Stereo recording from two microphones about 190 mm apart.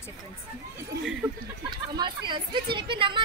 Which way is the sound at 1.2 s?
5° right (ahead or behind).